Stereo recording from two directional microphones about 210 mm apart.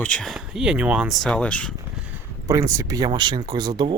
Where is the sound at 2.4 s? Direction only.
15° right (ahead or behind).